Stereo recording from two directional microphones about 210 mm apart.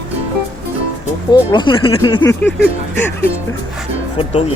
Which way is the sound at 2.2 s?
10° left (ahead or behind).